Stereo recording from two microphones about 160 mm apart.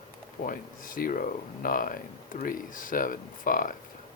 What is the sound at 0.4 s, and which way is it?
Speech, 60° left (ahead or behind).